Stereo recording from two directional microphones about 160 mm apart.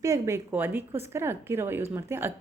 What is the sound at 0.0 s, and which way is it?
Speech, 20° right (ahead or behind).